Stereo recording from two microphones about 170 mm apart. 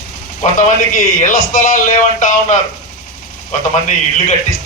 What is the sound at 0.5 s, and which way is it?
A man's voice, 50° left (ahead or behind).